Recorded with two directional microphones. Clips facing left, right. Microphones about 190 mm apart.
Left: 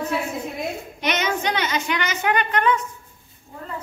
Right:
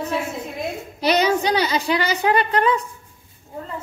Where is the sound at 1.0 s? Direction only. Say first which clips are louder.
Right 6 dB; 35° right (ahead or behind).